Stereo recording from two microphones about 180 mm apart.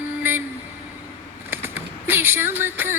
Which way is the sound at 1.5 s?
10° right (ahead or behind).